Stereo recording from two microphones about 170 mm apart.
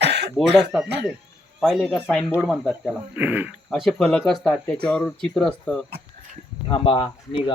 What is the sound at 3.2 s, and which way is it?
Speech, 10° right (ahead or behind).